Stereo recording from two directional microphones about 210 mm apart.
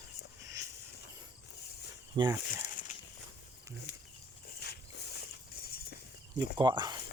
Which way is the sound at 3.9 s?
50° left (ahead or behind).